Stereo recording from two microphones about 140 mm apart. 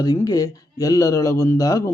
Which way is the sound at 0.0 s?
25° left (ahead or behind).